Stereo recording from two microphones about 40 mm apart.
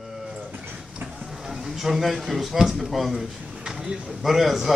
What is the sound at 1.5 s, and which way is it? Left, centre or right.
A man's voice, centre.